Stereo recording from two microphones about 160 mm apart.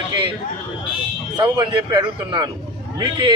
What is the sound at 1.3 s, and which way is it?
Speech, 25° right (ahead or behind).